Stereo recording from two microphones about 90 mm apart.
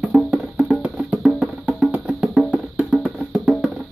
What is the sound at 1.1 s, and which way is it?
Music, 5° right (ahead or behind).